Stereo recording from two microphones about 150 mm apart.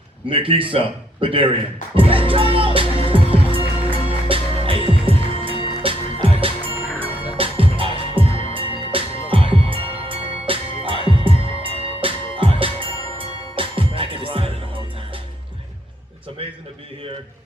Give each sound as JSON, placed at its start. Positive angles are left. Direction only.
{"t": 0.3, "sound": "a man's voice", "side_deg": -35}
{"t": 2.0, "sound": "music", "side_deg": -35}